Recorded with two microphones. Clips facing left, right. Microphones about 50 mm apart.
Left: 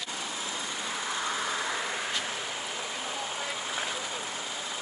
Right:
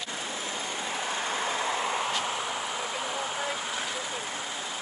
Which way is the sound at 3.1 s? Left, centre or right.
Right.